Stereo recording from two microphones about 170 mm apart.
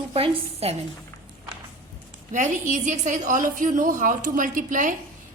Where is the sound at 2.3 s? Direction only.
45° right (ahead or behind).